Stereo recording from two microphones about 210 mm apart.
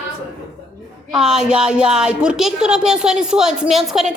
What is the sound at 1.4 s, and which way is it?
Speech, 5° right (ahead or behind).